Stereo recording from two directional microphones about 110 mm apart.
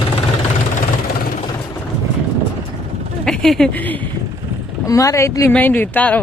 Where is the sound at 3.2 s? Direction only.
5° left (ahead or behind).